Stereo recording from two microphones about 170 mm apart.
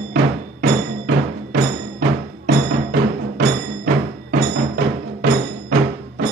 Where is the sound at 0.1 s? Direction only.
60° right (ahead or behind).